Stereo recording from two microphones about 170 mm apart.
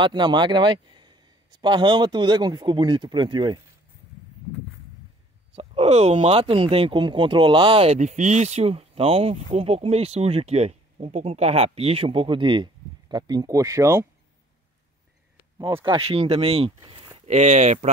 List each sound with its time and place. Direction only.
0.0 s speech: 25° right (ahead or behind)
5.6 s speech: 40° right (ahead or behind); by 14.0 s 20° right (ahead or behind)
15.8 s speech: 30° right (ahead or behind)
17.3 s speech: 45° right (ahead or behind)